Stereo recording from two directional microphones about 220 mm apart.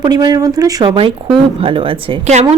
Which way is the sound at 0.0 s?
20° right (ahead or behind).